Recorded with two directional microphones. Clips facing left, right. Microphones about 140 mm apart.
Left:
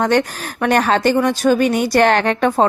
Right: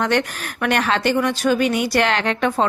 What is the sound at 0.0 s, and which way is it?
A woman's voice, 35° left (ahead or behind).